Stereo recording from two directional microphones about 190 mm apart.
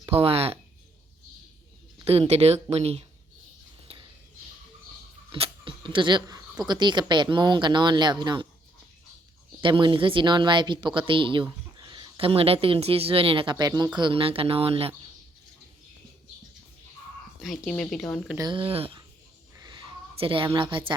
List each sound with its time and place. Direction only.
0.0 s speech: 30° right (ahead or behind)
2.0 s speech: 30° right (ahead or behind)
3.9 s a sound: 30° right (ahead or behind)
5.3 s speech: 25° right (ahead or behind)
9.6 s speech: 25° right (ahead or behind)
17.4 s speech: centre (ahead or behind)
18.3 s speech: 25° right (ahead or behind)
19.5 s a sound: 20° right (ahead or behind)